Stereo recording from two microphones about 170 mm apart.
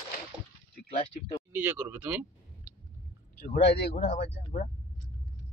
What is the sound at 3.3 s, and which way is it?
Speech, 65° left (ahead or behind).